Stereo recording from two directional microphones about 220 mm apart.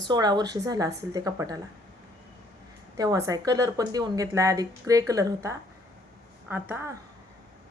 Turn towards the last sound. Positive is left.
turn(degrees=-10)  # may be behind; listen again after turning